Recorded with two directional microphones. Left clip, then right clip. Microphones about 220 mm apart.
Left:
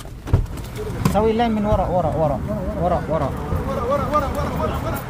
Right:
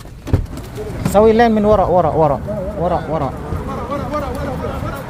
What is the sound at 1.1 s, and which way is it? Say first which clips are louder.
Speech: right 9 dB; 25° right (ahead or behind).